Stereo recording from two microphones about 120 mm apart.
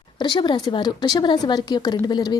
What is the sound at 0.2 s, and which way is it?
Speech, 40° left (ahead or behind).